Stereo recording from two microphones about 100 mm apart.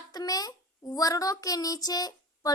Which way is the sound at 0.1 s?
40° left (ahead or behind).